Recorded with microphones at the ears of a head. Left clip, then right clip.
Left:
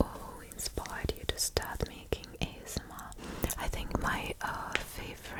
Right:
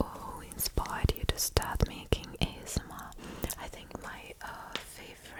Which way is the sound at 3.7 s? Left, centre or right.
Left.